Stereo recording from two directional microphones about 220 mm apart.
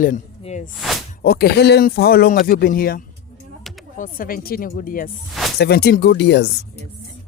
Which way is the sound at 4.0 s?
40° left (ahead or behind).